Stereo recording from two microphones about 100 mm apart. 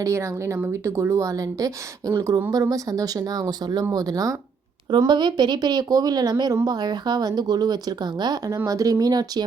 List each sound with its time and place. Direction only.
0.0 s speech: 30° right (ahead or behind)
4.9 s speech: 50° right (ahead or behind)